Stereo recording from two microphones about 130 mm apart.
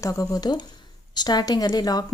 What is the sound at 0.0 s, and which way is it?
A woman's voice, 25° left (ahead or behind).